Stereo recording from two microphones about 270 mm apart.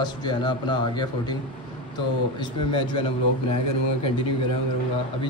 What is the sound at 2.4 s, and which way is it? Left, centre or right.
Speech, centre.